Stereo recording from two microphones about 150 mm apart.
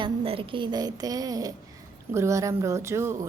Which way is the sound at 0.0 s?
35° right (ahead or behind).